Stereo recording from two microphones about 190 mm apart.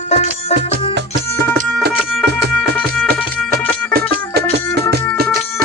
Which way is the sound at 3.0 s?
50° right (ahead or behind).